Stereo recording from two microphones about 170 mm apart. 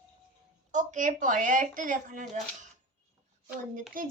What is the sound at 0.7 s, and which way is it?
Speech, 45° right (ahead or behind).